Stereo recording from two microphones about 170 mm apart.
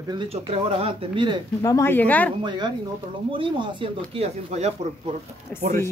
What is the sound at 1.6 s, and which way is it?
Speech, 15° left (ahead or behind).